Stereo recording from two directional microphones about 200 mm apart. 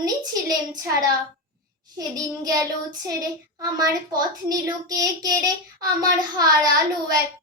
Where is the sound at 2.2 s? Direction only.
20° right (ahead or behind).